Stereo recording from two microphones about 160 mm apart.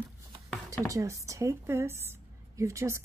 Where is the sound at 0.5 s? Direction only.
5° left (ahead or behind).